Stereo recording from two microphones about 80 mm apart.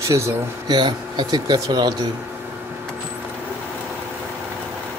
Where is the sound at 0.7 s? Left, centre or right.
Right.